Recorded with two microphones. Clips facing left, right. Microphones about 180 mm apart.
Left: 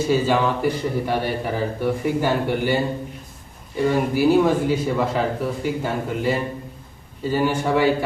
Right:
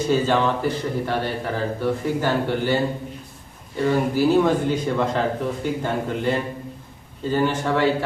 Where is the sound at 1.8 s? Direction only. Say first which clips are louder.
Left 2 dB; 10° left (ahead or behind).